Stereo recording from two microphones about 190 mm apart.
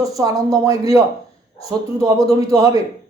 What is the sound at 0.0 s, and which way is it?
A man's voice, 20° right (ahead or behind).